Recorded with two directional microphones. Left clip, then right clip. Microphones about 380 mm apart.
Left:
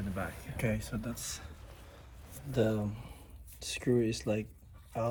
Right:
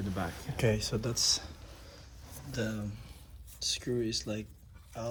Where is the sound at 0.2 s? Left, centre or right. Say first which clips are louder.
Right 4 dB; right.